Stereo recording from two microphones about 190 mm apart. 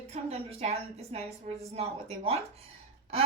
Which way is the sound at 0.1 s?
30° right (ahead or behind).